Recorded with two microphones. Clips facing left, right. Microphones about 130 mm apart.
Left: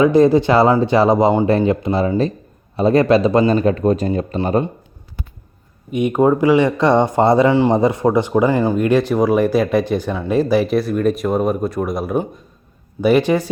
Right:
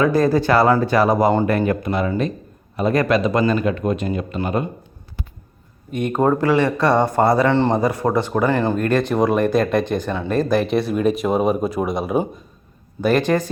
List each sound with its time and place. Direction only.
0.0 s speech: 20° left (ahead or behind)
5.9 s speech: 10° left (ahead or behind)
7.5 s speech: 10° left (ahead or behind)
7.8 s speech: 20° left (ahead or behind); by 12.3 s 5° right (ahead or behind)
13.0 s speech: 10° left (ahead or behind)